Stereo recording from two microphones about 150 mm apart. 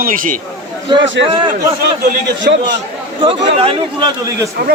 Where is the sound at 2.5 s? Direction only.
90° right.